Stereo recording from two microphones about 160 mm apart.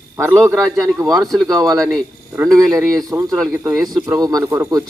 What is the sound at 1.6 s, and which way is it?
Speech, 20° right (ahead or behind).